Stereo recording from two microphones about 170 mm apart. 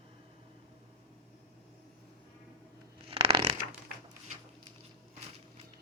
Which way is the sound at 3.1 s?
35° right (ahead or behind).